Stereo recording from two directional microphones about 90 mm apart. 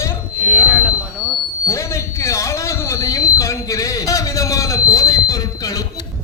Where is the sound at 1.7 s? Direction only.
35° left (ahead or behind).